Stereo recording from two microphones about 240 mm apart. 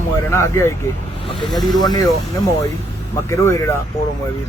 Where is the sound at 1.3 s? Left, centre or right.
Centre.